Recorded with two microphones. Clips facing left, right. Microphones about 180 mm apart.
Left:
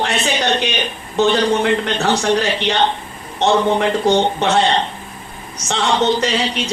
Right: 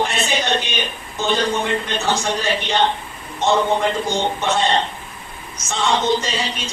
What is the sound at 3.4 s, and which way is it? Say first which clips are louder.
Speech: left 3 dB; 75° left (ahead or behind).